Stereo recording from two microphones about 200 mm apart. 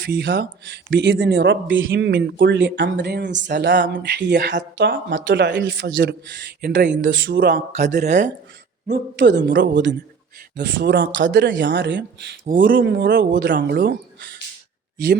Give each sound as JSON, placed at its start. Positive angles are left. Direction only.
{"t": 0.0, "sound": "speech", "side_deg": -55}
{"t": 2.0, "sound": "speech", "side_deg": -55}
{"t": 7.0, "sound": "speech", "side_deg": -65}
{"t": 8.0, "sound": "speech", "side_deg": -35}
{"t": 8.9, "sound": "speech", "side_deg": -60}
{"t": 12.5, "sound": "speech", "side_deg": -45}
{"t": 12.8, "sound": "speech", "side_deg": -60}